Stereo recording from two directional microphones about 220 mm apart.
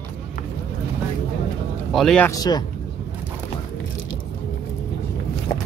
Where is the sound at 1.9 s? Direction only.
Centre (ahead or behind).